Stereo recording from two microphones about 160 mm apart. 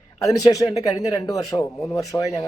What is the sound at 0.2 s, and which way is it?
Speech, 20° left (ahead or behind).